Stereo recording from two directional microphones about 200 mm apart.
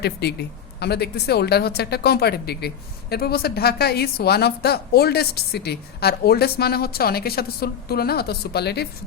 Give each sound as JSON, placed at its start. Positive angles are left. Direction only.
{"t": 0.0, "sound": "speech", "side_deg": 55}